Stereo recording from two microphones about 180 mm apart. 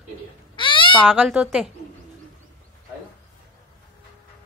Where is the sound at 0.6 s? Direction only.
30° left (ahead or behind).